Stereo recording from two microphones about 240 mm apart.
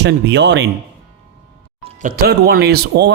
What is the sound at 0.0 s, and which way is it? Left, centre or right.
Speech, right.